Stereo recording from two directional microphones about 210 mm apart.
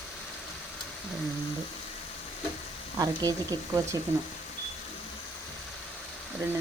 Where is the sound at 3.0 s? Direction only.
15° right (ahead or behind).